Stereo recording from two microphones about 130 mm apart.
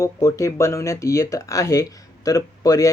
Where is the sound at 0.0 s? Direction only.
25° left (ahead or behind).